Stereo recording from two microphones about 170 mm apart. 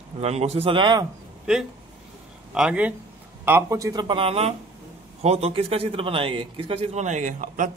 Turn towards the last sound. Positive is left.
turn(degrees=-50)  # may be behind; listen again after turning